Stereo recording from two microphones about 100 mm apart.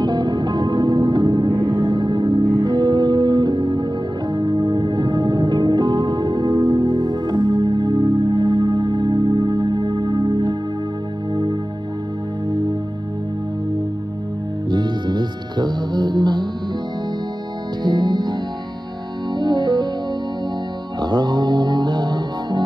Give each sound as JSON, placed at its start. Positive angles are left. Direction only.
{"t": 0.0, "sound": "music", "side_deg": -45}
{"t": 14.7, "sound": "music", "side_deg": -45}
{"t": 17.8, "sound": "music", "side_deg": -50}
{"t": 19.3, "sound": "music", "side_deg": -45}
{"t": 21.0, "sound": "music", "side_deg": -45}